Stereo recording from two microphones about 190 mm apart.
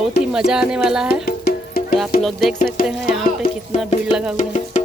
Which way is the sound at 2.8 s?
50° left (ahead or behind).